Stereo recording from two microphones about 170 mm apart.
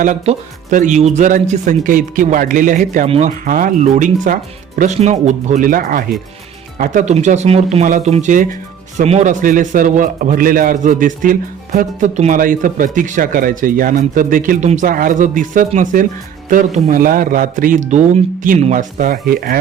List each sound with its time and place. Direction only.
0.0 s a man's voice: 50° right (ahead or behind)
19.3 s speech: 60° right (ahead or behind)